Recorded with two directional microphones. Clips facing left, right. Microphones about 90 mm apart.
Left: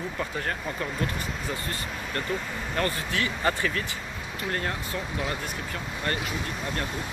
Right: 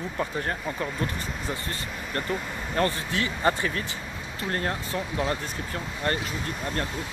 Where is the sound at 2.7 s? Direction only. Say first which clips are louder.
Right 2 dB; 30° right (ahead or behind).